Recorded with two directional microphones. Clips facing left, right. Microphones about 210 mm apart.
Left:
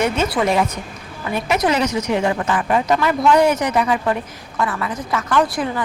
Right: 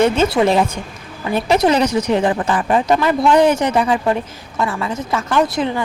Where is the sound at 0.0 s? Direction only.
25° right (ahead or behind).